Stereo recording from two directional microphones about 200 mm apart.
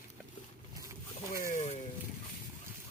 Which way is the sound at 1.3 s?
45° left (ahead or behind).